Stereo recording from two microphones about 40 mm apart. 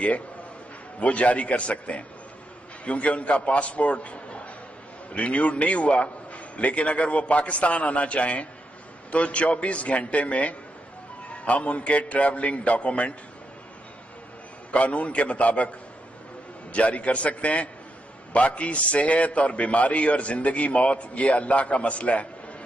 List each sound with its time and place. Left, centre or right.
0.9 s a man's voice: left
14.7 s a man's voice: left
16.7 s a man's voice: left